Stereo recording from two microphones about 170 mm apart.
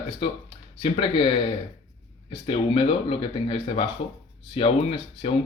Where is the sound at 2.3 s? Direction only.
35° left (ahead or behind).